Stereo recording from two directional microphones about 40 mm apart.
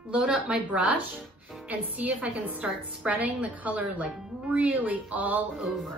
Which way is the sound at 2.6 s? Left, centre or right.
Right.